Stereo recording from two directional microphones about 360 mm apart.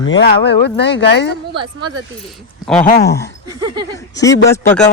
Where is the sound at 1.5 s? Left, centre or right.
Centre.